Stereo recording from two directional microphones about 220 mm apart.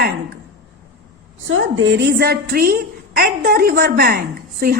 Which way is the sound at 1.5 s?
65° right (ahead or behind).